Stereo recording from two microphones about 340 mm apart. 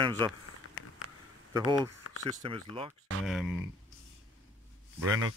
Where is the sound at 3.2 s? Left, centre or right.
Centre.